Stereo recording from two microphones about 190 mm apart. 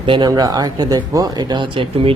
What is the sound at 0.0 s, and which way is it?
Speech, 25° right (ahead or behind).